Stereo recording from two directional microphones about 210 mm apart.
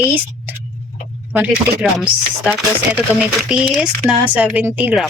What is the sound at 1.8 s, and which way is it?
Speech, 5° right (ahead or behind).